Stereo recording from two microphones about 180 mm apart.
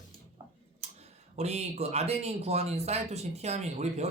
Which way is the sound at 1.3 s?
35° right (ahead or behind).